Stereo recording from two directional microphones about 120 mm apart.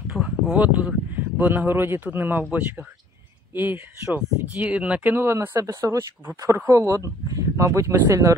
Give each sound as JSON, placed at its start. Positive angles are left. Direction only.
{"t": 0.1, "sound": "speech", "side_deg": -5}